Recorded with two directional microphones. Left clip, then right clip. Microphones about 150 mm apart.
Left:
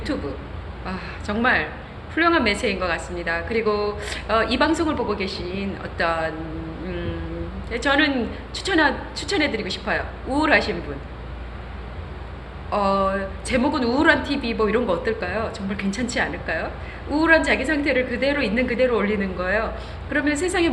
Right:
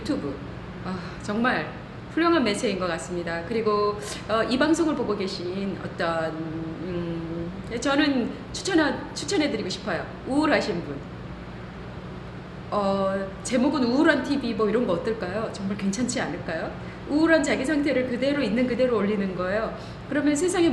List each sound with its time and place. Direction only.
0.9 s a woman's voice: 20° right (ahead or behind)
7.7 s a woman's voice: 20° right (ahead or behind)
12.7 s a woman's voice: 20° right (ahead or behind)